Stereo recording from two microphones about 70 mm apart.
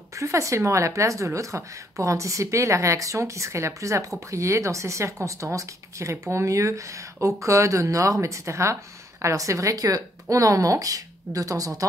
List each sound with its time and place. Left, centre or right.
0.1 s a woman's voice: right